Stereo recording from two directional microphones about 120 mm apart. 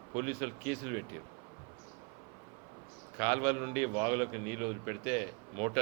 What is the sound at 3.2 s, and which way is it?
A man's voice, 20° right (ahead or behind).